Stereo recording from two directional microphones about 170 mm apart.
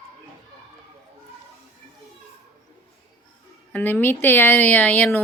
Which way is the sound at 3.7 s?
10° left (ahead or behind).